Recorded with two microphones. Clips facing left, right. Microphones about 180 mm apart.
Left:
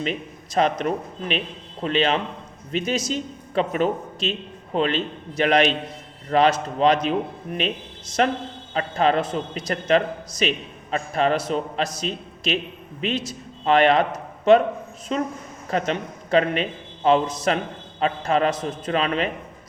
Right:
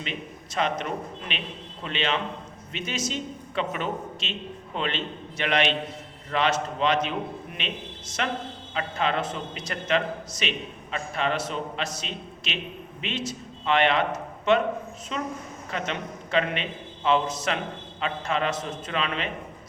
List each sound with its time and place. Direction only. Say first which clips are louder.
0.0 s a woman's voice: left 7 dB; 40° left (ahead or behind)